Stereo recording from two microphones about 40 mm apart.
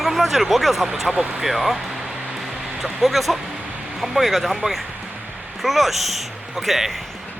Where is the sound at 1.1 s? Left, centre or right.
Right.